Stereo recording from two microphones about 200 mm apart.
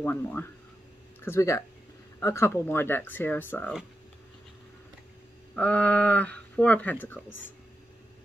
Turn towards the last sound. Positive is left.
turn(degrees=10)  # may be behind; listen again after turning